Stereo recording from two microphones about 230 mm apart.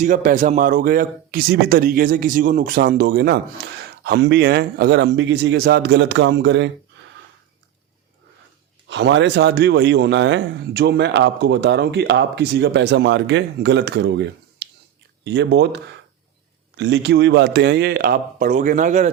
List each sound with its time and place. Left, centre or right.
0.0 s a man's voice: right
8.9 s a man's voice: right